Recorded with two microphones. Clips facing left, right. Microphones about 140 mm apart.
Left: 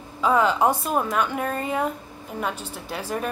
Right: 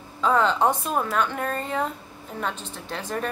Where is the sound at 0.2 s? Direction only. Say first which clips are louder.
Left 1 dB; 10° left (ahead or behind).